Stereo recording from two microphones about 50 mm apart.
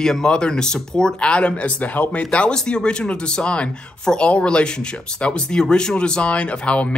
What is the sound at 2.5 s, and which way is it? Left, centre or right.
Speech, centre.